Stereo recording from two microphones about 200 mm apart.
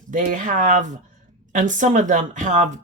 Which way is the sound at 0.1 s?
40° right (ahead or behind).